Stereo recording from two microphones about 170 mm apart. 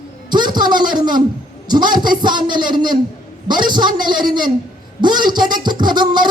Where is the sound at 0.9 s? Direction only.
25° right (ahead or behind).